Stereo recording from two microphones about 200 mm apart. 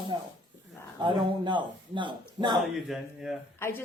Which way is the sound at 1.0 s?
25° right (ahead or behind).